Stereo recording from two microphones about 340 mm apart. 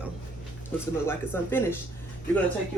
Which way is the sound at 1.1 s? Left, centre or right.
Centre.